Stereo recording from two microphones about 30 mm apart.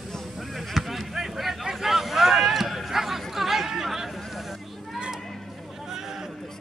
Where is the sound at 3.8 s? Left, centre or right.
Centre.